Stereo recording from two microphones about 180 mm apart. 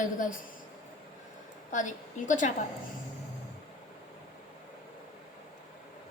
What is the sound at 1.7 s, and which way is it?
Speech, 45° left (ahead or behind).